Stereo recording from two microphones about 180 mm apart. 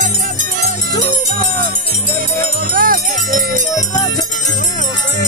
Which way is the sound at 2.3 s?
50° right (ahead or behind).